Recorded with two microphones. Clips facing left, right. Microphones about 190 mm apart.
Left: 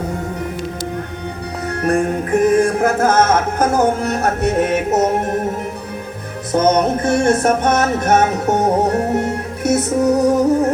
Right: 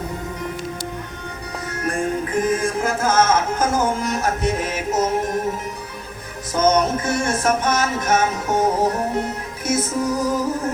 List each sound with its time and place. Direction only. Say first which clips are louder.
1.6 s music: left 7 dB; 65° left (ahead or behind)
6.5 s music: left 3 dB; 60° left (ahead or behind)